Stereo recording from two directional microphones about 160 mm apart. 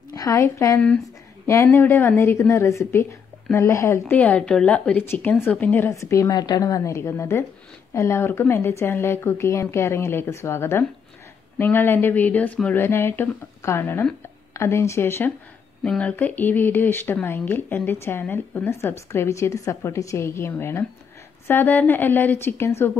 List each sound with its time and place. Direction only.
0.1 s speech: 20° left (ahead or behind)